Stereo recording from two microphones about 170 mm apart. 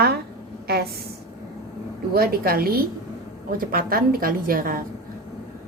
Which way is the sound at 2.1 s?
65° right (ahead or behind).